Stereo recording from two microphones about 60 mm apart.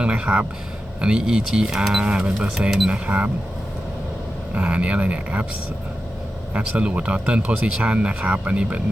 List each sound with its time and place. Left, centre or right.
0.0 s speech: right
2.6 s speech: centre
2.8 s speech: right
4.5 s speech: right
6.5 s speech: right